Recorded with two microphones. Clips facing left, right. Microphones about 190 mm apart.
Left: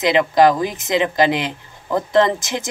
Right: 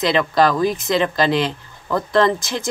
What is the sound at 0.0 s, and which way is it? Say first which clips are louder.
Speech: left 3 dB; 15° left (ahead or behind).